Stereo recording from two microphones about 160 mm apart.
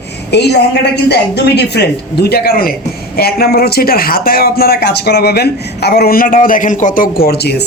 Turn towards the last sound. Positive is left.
turn(degrees=85)